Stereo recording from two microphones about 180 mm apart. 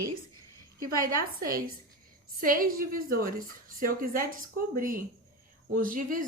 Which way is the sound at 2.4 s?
50° right (ahead or behind).